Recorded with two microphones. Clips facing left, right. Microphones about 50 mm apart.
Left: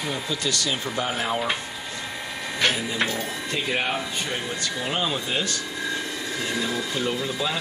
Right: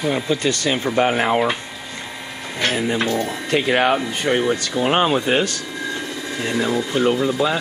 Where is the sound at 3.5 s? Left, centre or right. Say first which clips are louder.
Right 10 dB; right.